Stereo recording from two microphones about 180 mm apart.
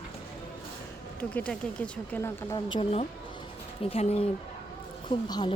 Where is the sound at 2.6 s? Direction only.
30° left (ahead or behind).